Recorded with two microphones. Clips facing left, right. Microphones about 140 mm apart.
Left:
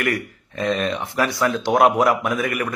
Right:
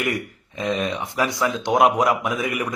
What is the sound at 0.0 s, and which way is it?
A man's voice, 15° right (ahead or behind).